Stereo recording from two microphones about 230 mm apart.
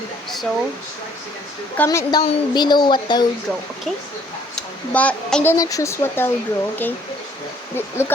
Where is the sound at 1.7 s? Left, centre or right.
Centre.